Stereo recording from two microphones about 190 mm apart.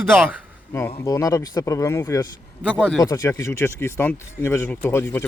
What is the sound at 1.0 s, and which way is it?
Speech, 20° left (ahead or behind).